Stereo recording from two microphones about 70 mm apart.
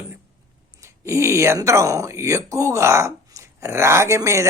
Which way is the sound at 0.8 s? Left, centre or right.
Right.